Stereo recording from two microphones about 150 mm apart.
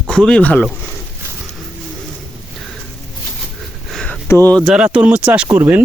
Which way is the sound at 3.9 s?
5° left (ahead or behind).